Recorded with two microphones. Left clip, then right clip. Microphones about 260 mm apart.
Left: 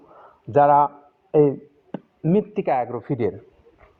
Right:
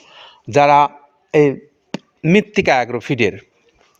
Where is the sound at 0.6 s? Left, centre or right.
Right.